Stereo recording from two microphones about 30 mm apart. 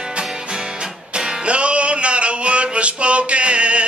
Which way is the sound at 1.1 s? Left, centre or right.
Right.